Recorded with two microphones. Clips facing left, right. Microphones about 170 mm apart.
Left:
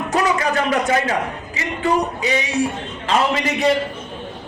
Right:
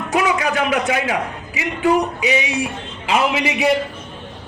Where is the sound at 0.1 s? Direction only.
10° right (ahead or behind).